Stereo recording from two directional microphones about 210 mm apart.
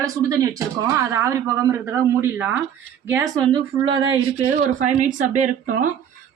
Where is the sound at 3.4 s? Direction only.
25° right (ahead or behind).